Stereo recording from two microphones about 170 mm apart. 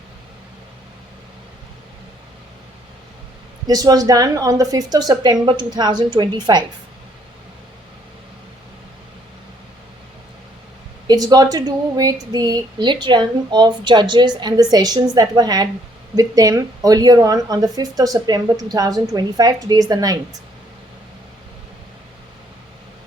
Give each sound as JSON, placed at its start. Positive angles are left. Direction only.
{"t": 3.7, "sound": "speech", "side_deg": -20}
{"t": 11.0, "sound": "speech", "side_deg": -25}